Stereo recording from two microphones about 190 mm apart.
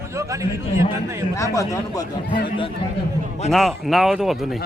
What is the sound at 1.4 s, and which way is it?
Speech, 15° left (ahead or behind).